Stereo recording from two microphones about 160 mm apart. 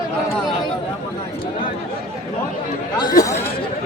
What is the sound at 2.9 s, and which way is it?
Chatter, 25° left (ahead or behind).